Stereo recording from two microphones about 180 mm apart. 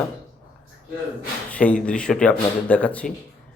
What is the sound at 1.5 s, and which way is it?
Speech, 5° left (ahead or behind).